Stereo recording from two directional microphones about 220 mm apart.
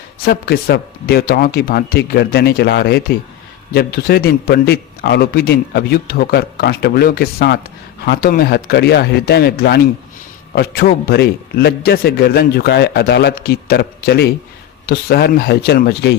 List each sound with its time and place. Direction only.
0.2 s a man's voice: 45° left (ahead or behind)